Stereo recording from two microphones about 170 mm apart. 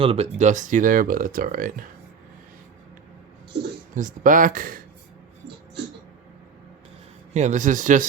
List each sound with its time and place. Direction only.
0.0 s speech: 35° right (ahead or behind); by 1.9 s 55° right (ahead or behind)
3.9 s speech: 50° right (ahead or behind)
7.3 s speech: 45° right (ahead or behind)